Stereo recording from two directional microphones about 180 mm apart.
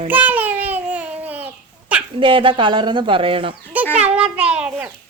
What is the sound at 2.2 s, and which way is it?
Speech, 30° right (ahead or behind).